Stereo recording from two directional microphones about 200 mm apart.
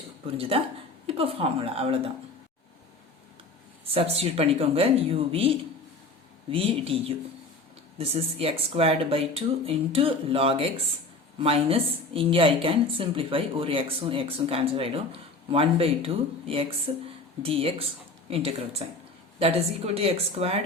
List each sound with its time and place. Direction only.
0.3 s a woman's voice: 30° right (ahead or behind)
3.8 s a woman's voice: 30° right (ahead or behind)